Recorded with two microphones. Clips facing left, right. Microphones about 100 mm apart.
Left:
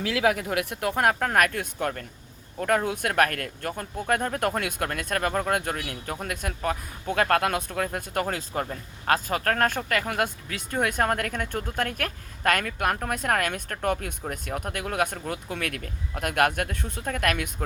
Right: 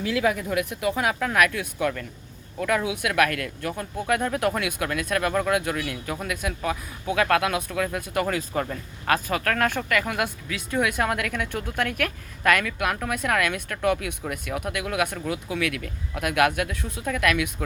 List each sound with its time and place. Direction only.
0.0 s speech: 65° left (ahead or behind); by 17.5 s 45° left (ahead or behind)